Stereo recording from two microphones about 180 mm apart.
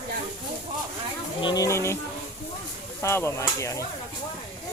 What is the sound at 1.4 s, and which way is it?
Speech, 20° left (ahead or behind).